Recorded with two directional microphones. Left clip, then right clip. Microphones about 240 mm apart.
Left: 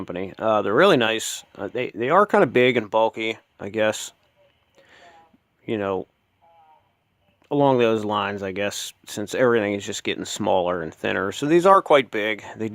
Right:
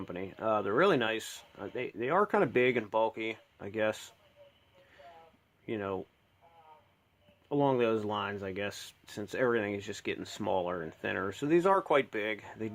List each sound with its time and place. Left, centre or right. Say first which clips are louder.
0.0 s speech: left 10 dB; left
5.6 s speech: left 11 dB; left
7.4 s speech: left 10 dB; left